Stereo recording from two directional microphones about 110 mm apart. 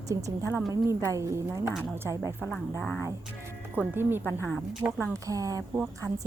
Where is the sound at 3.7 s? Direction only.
20° right (ahead or behind).